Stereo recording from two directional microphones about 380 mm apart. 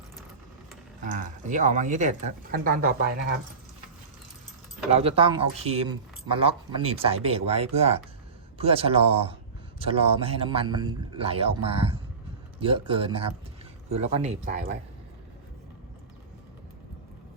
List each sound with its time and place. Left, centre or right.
1.0 s speech: centre
4.9 s speech: centre